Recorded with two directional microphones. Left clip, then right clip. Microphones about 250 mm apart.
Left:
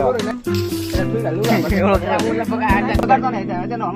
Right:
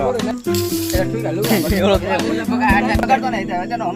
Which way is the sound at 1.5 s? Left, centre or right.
Right.